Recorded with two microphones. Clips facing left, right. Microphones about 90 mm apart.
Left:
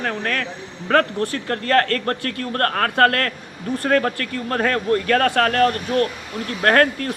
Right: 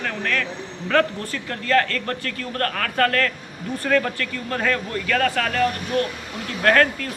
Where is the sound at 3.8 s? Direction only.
40° left (ahead or behind).